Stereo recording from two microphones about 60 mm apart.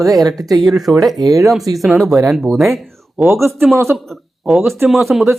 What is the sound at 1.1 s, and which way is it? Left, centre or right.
Speech, right.